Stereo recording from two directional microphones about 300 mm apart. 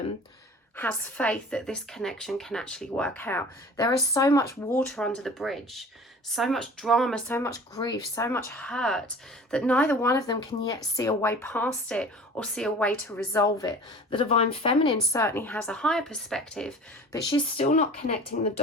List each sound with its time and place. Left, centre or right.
0.8 s a woman's voice: centre
17.2 s speech: centre
18.3 s speech: left